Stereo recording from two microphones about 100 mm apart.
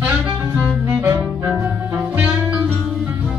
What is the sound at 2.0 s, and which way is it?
Music, 15° right (ahead or behind).